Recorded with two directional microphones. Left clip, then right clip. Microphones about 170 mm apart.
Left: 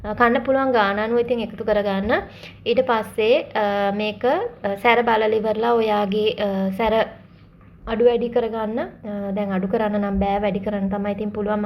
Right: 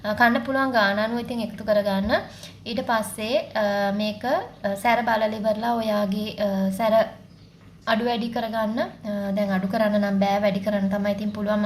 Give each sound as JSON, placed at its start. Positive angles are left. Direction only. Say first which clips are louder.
{"t": 0.0, "sound": "a woman's voice", "louder": "left 2 dB", "side_deg": 5}